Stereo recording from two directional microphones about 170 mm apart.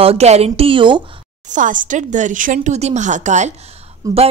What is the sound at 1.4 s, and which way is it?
A woman's voice, 50° right (ahead or behind).